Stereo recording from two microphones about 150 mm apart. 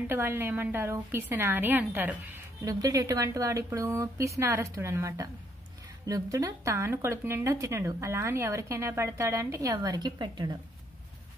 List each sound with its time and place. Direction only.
0.1 s a woman's voice: 15° right (ahead or behind)
2.6 s speech: 25° right (ahead or behind)